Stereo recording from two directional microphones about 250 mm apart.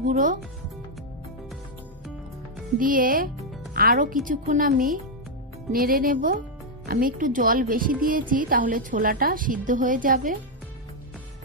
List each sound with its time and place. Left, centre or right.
0.0 s a woman's voice: right
2.8 s a woman's voice: right